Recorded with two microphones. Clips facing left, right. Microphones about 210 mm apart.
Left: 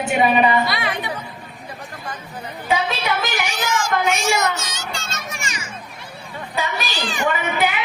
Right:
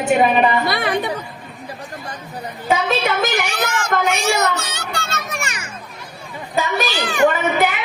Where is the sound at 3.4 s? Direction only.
60° right (ahead or behind).